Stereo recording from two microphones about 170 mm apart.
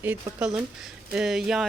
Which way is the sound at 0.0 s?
10° right (ahead or behind).